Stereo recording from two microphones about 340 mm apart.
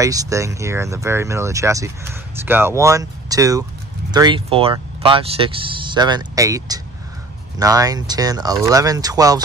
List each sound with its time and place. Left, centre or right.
0.0 s speech: centre